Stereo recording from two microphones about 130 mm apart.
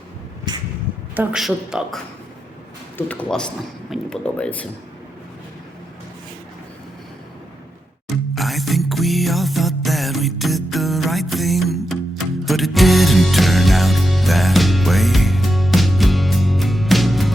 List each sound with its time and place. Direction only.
0.5 s vehicle: 35° right (ahead or behind)
1.1 s a woman's voice: 15° right (ahead or behind)
1.4 s a woman's voice: centre (ahead or behind)
3.1 s a man's voice: 10° left (ahead or behind)
8.0 s music: centre (ahead or behind)